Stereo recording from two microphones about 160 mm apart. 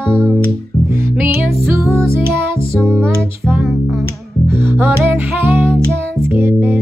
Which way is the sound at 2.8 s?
15° right (ahead or behind).